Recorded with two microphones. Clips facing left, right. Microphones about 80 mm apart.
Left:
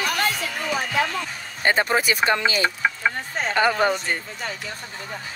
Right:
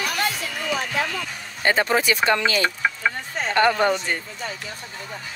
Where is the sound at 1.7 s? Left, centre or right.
Centre.